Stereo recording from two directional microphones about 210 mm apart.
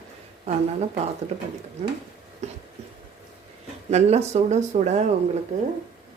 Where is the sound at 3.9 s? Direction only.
30° right (ahead or behind).